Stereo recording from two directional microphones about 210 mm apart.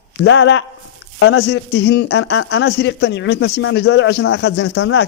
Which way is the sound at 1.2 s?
75° left (ahead or behind).